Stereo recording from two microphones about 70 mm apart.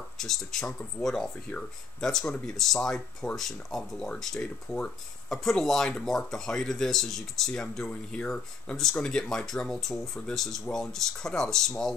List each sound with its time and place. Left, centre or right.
0.2 s speech: centre